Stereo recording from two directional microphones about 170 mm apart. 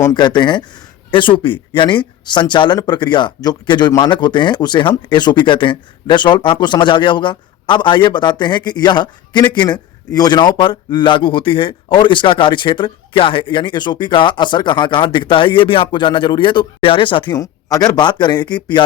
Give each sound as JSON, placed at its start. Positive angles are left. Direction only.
{"t": 0.0, "sound": "speech", "side_deg": 25}